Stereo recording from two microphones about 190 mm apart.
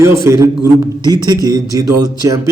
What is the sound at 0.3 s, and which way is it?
A man's voice, 15° right (ahead or behind).